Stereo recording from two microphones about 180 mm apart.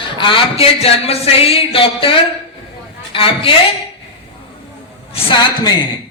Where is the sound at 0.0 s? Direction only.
30° left (ahead or behind).